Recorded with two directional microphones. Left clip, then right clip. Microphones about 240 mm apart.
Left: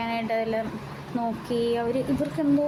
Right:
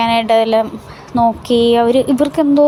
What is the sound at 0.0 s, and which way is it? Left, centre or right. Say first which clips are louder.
A woman's voice: right 15 dB; right.